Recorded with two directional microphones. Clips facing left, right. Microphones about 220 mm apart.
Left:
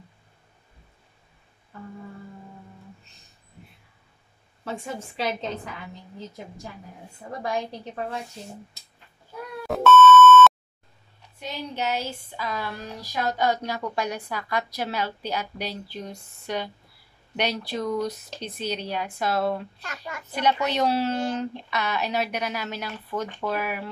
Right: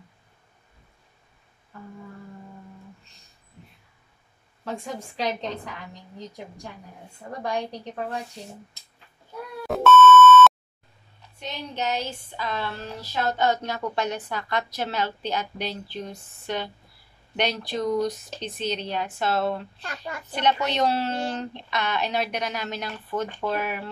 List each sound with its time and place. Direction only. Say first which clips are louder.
1.7 s humming: left 2 dB; centre (ahead or behind)
4.6 s a woman's voice: even; 5° left (ahead or behind)
9.7 s beep: even; centre (ahead or behind)
11.3 s speech: left 1 dB; 10° left (ahead or behind)
19.8 s a child's voice: right 2 dB; 35° right (ahead or behind)
20.3 s speech: even; 10° left (ahead or behind)